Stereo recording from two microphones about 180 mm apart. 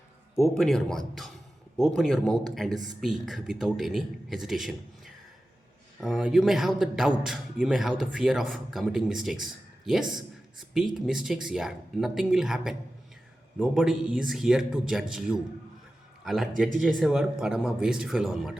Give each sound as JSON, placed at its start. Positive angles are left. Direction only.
{"t": 0.5, "sound": "a man's voice", "side_deg": 5}
{"t": 16.2, "sound": "a man's voice", "side_deg": 0}